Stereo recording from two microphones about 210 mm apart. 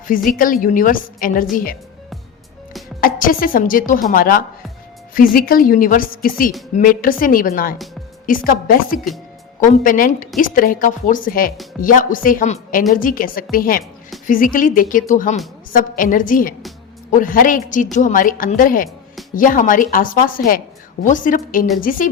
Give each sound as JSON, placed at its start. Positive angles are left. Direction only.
{"t": 0.3, "sound": "a woman's voice", "side_deg": 40}
{"t": 3.0, "sound": "a woman's voice", "side_deg": 40}